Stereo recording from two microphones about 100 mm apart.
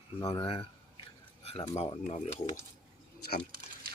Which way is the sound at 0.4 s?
65° left (ahead or behind).